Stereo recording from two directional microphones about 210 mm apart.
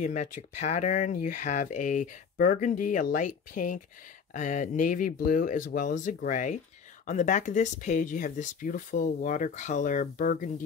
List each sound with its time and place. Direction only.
0.0 s speech: 35° left (ahead or behind)